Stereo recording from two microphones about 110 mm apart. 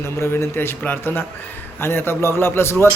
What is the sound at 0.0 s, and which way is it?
A man's voice, 25° left (ahead or behind).